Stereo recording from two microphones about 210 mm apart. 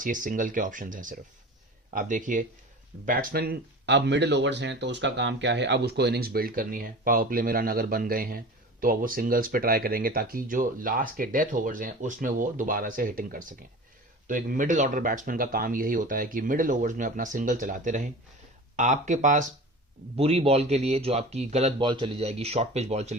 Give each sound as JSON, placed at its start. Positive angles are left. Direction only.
{"t": 0.0, "sound": "speech", "side_deg": -40}